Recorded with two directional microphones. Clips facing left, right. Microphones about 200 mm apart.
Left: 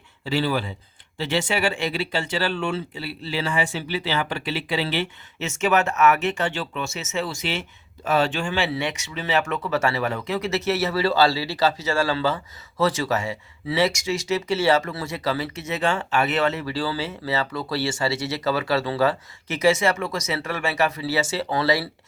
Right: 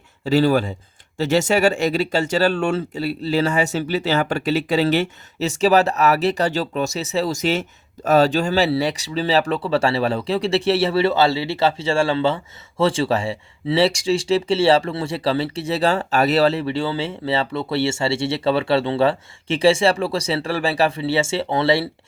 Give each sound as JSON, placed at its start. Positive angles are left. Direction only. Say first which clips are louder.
{"t": 0.3, "sound": "speech", "louder": "right 7 dB", "side_deg": -45}